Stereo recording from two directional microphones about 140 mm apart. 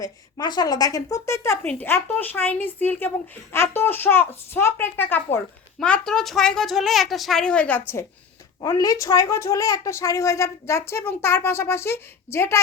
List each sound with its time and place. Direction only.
0.0 s a child's voice: 30° left (ahead or behind); by 8.0 s 15° left (ahead or behind)
8.6 s speech: 25° left (ahead or behind)